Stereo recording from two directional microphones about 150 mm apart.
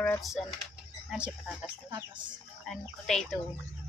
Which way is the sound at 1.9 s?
30° right (ahead or behind).